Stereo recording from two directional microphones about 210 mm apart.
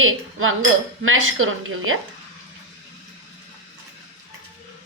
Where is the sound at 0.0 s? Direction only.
75° right (ahead or behind).